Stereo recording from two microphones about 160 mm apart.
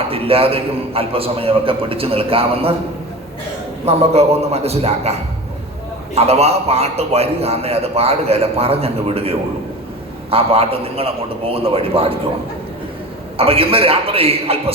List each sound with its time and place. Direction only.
0.1 s a man's voice: 35° right (ahead or behind)
3.8 s a man's voice: 40° right (ahead or behind)
13.3 s a man's voice: 35° right (ahead or behind)